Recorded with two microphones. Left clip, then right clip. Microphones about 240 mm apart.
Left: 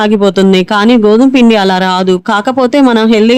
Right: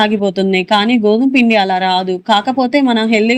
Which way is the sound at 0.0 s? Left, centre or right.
Left.